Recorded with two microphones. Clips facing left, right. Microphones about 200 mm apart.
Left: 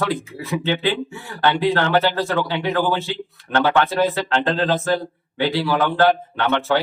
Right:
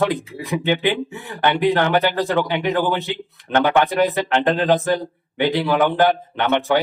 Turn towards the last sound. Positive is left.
turn(degrees=-15)  # may be behind; listen again after turning